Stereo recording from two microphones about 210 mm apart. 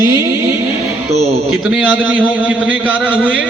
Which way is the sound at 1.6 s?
5° right (ahead or behind).